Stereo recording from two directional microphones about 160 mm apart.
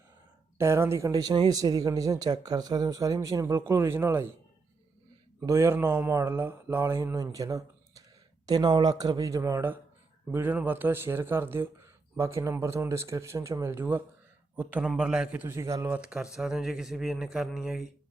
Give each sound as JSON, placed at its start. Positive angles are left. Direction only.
{"t": 0.6, "sound": "speech", "side_deg": -15}
{"t": 5.4, "sound": "a man's voice", "side_deg": -15}